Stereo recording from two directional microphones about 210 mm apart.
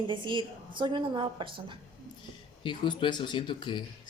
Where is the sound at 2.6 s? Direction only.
25° left (ahead or behind).